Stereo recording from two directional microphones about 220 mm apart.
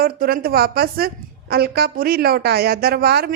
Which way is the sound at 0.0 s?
40° right (ahead or behind).